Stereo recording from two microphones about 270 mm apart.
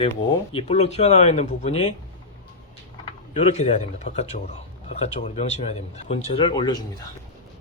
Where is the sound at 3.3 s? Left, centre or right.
Left.